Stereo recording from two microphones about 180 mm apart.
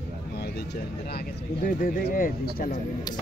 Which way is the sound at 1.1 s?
55° left (ahead or behind).